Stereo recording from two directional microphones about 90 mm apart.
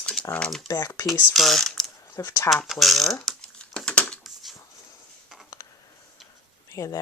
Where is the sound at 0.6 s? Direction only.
45° left (ahead or behind).